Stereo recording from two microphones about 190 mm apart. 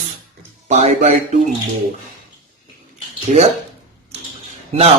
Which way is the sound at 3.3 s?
35° right (ahead or behind).